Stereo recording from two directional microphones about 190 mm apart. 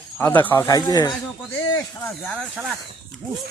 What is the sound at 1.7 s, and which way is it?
Speech, 5° left (ahead or behind).